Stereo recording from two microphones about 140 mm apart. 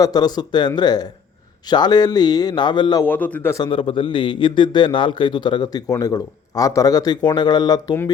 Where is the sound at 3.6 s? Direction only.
35° left (ahead or behind).